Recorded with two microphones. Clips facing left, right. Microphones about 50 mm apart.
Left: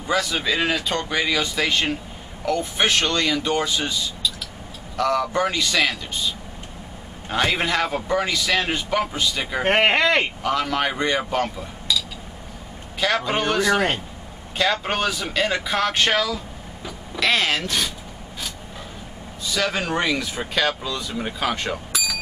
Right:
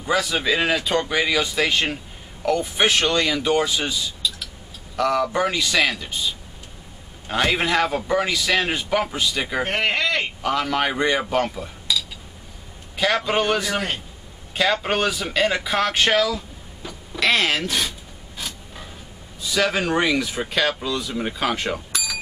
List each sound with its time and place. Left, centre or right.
0.0 s a man's voice: centre
9.7 s speech: left
10.4 s a man's voice: centre
13.0 s a man's voice: centre
19.4 s a man's voice: centre